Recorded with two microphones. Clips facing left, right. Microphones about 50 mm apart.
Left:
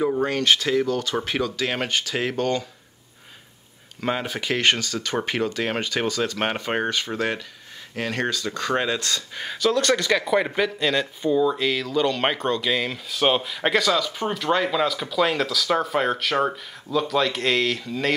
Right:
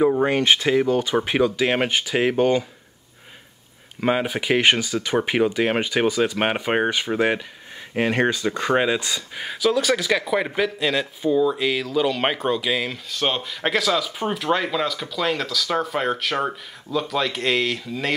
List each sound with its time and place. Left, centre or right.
0.0 s speech: centre
4.0 s speech: centre